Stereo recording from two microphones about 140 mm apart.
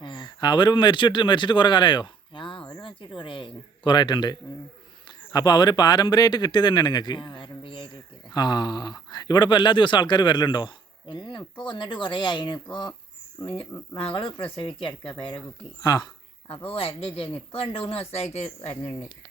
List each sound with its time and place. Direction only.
0.0 s speech: 30° left (ahead or behind)
13.9 s speech: 40° left (ahead or behind)
15.8 s speech: 25° left (ahead or behind)
16.6 s speech: 40° left (ahead or behind)